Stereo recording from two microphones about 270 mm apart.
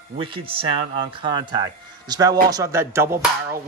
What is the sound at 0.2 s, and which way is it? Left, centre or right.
Speech, centre.